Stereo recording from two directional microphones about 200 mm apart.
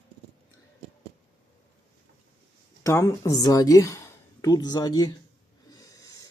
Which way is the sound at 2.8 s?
15° left (ahead or behind).